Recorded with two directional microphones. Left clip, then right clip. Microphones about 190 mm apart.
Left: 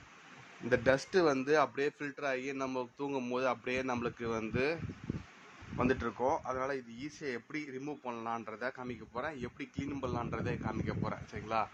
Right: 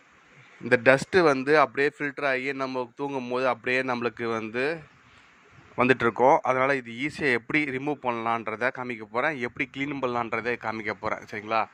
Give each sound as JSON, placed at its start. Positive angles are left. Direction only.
{"t": 0.7, "sound": "speech", "side_deg": -25}
{"t": 5.7, "sound": "speech", "side_deg": -35}